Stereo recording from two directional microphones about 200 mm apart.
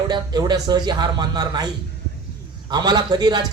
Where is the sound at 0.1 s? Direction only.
20° right (ahead or behind).